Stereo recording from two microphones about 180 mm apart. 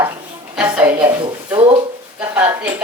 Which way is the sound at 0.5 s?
10° right (ahead or behind).